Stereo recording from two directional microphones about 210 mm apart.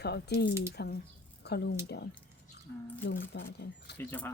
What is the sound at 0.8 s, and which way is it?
Speech, 50° left (ahead or behind).